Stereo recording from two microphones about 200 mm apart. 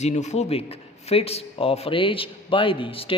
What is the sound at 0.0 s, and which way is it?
A man's voice, 35° left (ahead or behind).